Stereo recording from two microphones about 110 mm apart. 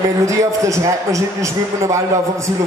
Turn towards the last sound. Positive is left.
turn(degrees=-30)  # may be behind; listen again after turning